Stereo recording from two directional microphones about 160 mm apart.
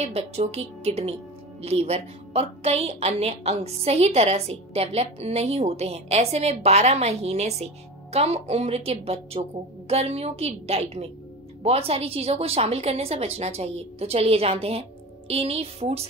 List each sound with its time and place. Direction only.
0.0 s a woman's voice: 40° right (ahead or behind)